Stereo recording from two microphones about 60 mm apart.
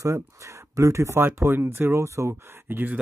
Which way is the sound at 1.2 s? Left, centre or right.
Right.